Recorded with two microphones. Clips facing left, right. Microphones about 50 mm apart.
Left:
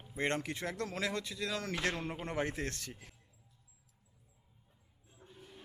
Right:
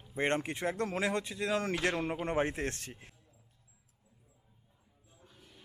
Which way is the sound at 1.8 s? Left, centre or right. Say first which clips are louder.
Right 4 dB; right.